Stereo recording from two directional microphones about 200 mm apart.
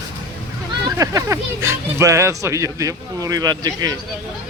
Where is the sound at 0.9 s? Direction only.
15° right (ahead or behind).